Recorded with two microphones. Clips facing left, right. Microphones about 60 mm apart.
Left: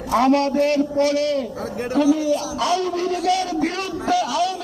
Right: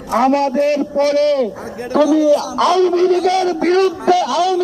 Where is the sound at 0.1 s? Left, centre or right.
Right.